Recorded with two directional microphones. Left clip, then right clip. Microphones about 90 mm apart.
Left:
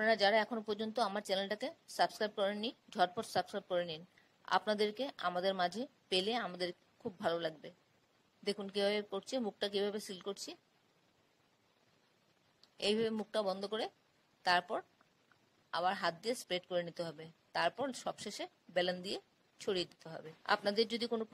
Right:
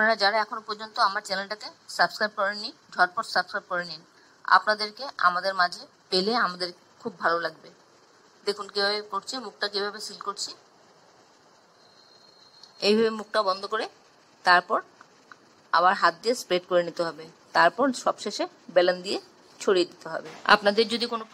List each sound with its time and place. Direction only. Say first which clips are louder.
0.0 s a woman's voice: right 8 dB; 40° left (ahead or behind)
12.7 s a woman's voice: right 12 dB; 40° left (ahead or behind)
20.4 s speech: right 13 dB; 55° left (ahead or behind)